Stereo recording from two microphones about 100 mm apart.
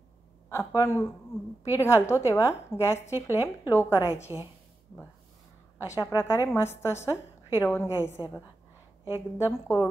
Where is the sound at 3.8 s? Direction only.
25° left (ahead or behind).